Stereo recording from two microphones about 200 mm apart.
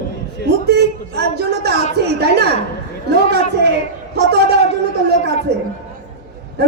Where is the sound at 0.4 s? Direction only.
55° right (ahead or behind).